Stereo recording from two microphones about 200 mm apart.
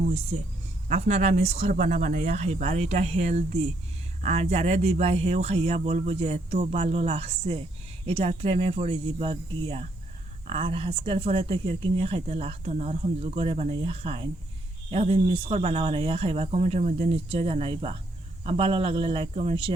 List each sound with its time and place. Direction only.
0.0 s speech: 30° right (ahead or behind)